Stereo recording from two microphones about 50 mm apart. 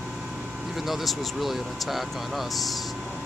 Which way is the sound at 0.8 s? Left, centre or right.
Centre.